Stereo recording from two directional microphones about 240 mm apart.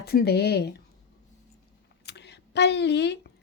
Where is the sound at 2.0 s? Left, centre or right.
Left.